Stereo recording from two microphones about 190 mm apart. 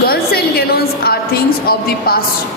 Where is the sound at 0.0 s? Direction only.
55° left (ahead or behind).